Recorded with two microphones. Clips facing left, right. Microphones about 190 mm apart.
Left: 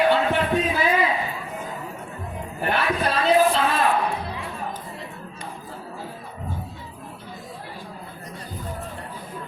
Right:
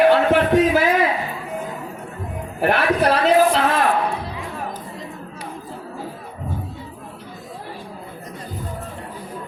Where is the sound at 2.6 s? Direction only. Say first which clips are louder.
Right 6 dB; 80° right.